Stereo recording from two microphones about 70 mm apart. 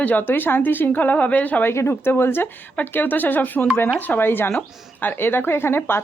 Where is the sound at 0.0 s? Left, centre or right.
Left.